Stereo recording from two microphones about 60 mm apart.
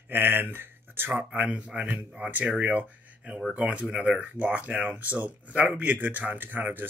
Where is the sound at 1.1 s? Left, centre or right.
Right.